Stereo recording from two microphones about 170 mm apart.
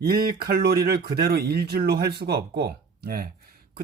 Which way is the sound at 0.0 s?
60° right (ahead or behind).